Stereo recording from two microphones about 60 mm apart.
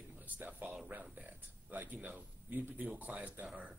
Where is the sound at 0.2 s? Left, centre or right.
Right.